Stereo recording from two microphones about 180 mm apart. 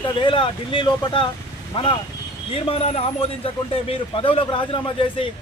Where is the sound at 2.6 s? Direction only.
35° left (ahead or behind).